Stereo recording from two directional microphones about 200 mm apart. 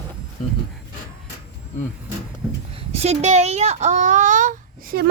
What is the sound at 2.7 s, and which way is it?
A child's voice, 30° right (ahead or behind).